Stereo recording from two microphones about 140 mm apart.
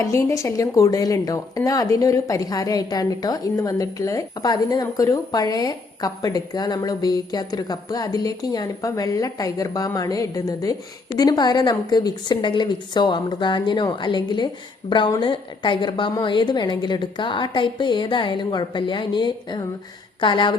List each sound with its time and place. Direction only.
0.0 s a woman's voice: 20° left (ahead or behind)